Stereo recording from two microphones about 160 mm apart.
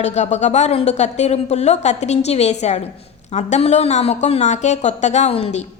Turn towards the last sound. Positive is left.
turn(degrees=40)  # may be behind; listen again after turning